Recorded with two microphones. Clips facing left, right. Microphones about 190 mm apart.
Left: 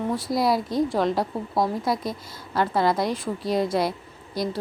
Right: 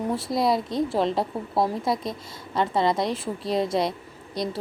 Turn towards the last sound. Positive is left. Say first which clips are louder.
# left 1 dB
turn(degrees=0)  # may be behind; listen again after turning